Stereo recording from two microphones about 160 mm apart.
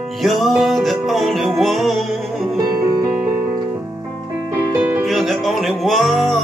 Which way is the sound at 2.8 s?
20° right (ahead or behind).